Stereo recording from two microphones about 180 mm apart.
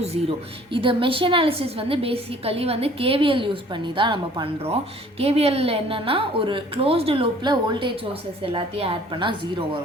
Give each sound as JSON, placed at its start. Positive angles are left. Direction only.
{"t": 0.0, "sound": "a woman's voice", "side_deg": -30}